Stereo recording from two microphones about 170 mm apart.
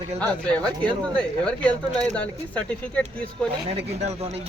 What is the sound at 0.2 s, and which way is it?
Speech, 5° left (ahead or behind).